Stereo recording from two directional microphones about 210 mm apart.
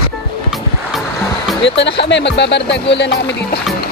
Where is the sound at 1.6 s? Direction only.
55° left (ahead or behind).